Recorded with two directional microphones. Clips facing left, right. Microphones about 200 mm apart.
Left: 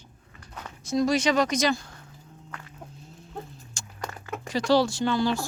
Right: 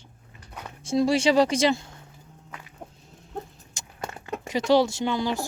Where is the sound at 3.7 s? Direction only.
20° right (ahead or behind).